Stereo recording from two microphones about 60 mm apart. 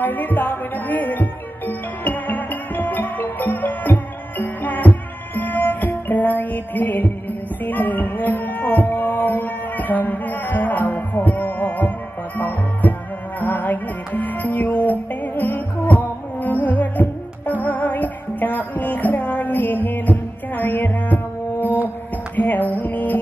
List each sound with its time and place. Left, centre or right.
0.0 s music: left